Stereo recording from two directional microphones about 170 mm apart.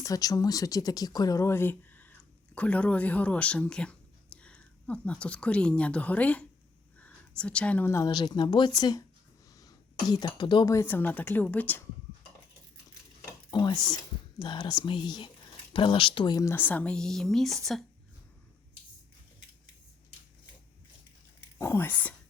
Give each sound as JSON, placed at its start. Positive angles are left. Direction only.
{"t": 0.0, "sound": "speech", "side_deg": 20}
{"t": 13.5, "sound": "speech", "side_deg": 25}
{"t": 21.6, "sound": "speech", "side_deg": 15}